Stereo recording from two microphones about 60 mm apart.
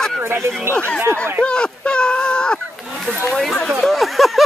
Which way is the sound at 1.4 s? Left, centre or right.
Centre.